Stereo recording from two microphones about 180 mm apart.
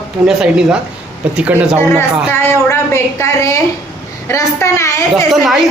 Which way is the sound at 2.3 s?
15° left (ahead or behind).